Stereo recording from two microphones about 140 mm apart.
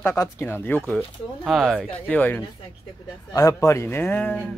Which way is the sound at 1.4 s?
Centre (ahead or behind).